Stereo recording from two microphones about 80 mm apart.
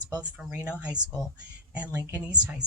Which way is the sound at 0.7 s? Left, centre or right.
Centre.